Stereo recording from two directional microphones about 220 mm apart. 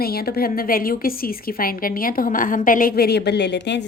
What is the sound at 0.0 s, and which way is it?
A woman's voice, 45° left (ahead or behind).